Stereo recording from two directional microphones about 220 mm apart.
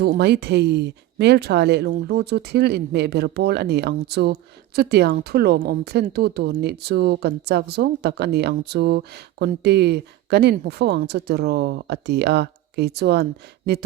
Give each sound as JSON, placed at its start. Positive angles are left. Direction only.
{"t": 0.0, "sound": "speech", "side_deg": -50}